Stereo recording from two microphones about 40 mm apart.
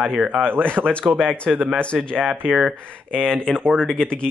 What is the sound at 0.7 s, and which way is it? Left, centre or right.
Speech, right.